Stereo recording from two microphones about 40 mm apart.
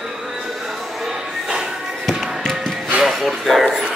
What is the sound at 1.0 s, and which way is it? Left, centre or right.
Music, centre.